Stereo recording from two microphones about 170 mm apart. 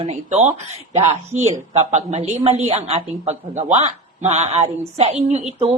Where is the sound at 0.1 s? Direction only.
45° right (ahead or behind).